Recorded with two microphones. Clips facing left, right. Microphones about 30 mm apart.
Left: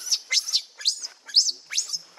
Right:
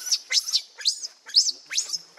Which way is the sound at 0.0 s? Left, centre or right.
Centre.